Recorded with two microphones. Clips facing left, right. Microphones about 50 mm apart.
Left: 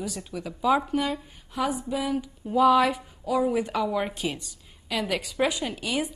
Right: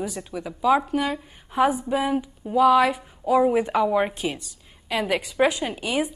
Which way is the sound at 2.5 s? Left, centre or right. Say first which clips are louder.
Right 2 dB; centre.